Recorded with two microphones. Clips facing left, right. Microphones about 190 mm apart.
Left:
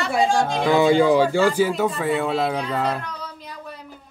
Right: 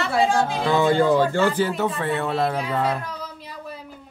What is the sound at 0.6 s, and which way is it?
Speech, 10° left (ahead or behind).